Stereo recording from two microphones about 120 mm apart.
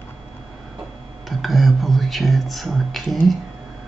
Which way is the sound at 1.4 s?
Centre (ahead or behind).